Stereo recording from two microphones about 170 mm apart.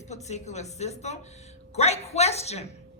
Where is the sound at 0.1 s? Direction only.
40° left (ahead or behind).